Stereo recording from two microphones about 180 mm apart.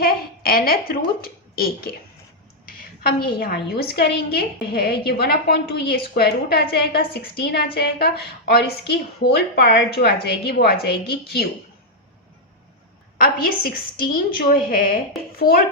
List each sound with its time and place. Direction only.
0.0 s a child's voice: 55° left (ahead or behind)
3.2 s a woman's voice: 55° left (ahead or behind)
13.1 s a woman's voice: 55° left (ahead or behind)